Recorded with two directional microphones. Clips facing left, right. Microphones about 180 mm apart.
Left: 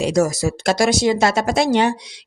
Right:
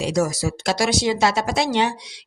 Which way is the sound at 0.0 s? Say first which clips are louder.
Left 4 dB; 45° left (ahead or behind).